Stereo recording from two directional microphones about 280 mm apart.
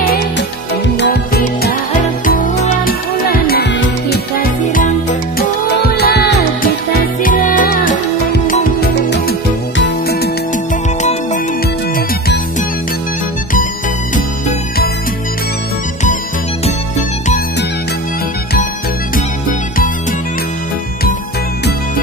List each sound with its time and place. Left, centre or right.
0.0 s music: left
11.0 s music: left